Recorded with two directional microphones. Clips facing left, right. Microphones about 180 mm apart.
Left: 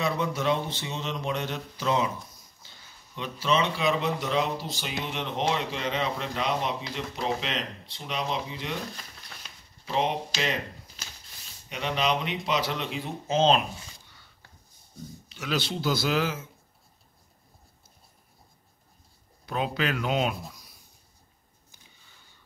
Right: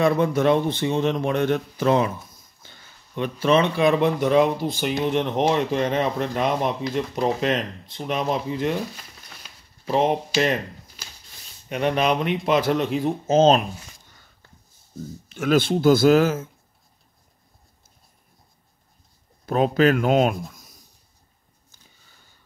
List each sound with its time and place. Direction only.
0.0 s speech: 55° right (ahead or behind)
9.8 s speech: 50° right (ahead or behind)
11.7 s speech: 55° right (ahead or behind)
19.4 s speech: 45° right (ahead or behind)
20.5 s writing: 45° right (ahead or behind)